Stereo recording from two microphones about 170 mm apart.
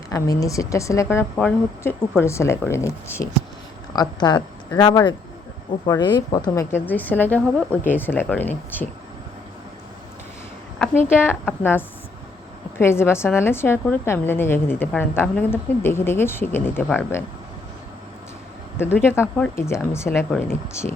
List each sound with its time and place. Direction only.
0.1 s a woman's voice: 20° left (ahead or behind)
10.8 s a woman's voice: 10° left (ahead or behind)
18.8 s a woman's voice: 15° left (ahead or behind)